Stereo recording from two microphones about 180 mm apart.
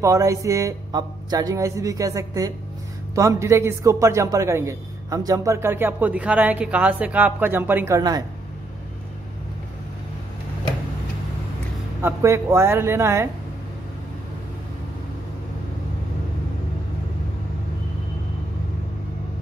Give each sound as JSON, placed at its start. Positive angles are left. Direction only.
{"t": 0.0, "sound": "a man's voice", "side_deg": -15}
{"t": 12.0, "sound": "a man's voice", "side_deg": -15}